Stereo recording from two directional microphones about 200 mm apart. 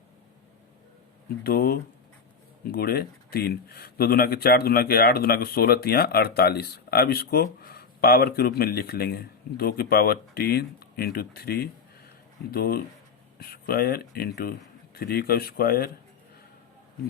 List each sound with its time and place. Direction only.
1.5 s speech: 50° left (ahead or behind)